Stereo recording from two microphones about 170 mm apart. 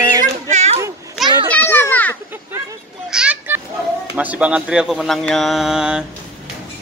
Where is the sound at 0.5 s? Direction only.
40° right (ahead or behind).